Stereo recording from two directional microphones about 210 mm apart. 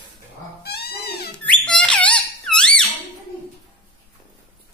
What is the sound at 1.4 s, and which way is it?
Squeak, 5° left (ahead or behind).